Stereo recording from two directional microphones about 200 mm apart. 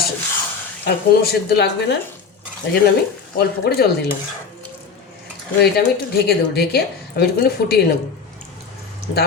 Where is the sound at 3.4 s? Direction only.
50° left (ahead or behind).